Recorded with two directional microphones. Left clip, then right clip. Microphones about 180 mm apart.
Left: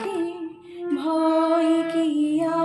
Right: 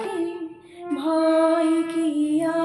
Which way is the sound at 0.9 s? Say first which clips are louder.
Right 2 dB; 20° right (ahead or behind).